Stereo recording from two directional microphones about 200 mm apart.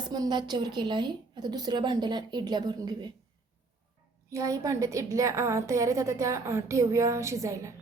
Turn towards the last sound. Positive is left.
turn(degrees=-15)  # may be behind; listen again after turning